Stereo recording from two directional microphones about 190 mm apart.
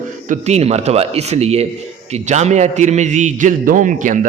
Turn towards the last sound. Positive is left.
turn(degrees=-45)  # may be behind; listen again after turning